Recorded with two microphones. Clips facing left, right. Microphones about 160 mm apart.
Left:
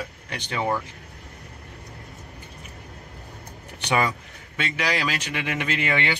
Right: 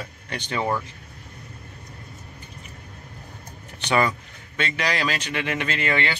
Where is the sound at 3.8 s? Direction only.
10° left (ahead or behind).